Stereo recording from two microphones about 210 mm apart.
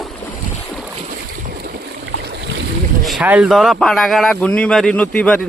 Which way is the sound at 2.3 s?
55° right (ahead or behind).